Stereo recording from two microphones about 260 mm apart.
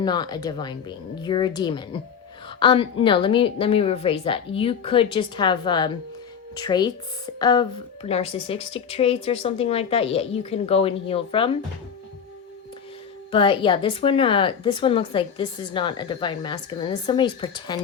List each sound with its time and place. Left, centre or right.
0.0 s speech: centre
13.3 s speech: centre